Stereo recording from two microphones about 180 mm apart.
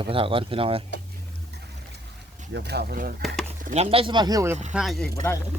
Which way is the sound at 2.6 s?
65° right (ahead or behind).